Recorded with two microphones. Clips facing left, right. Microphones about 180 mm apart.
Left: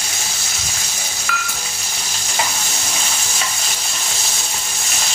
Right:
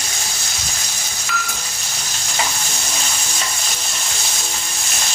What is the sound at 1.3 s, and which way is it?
Frying, 25° right (ahead or behind).